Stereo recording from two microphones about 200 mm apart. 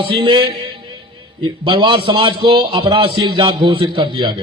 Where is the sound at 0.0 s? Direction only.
25° right (ahead or behind).